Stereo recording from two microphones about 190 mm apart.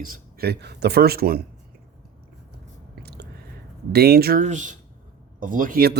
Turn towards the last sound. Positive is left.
turn(degrees=-50)  # may be behind; listen again after turning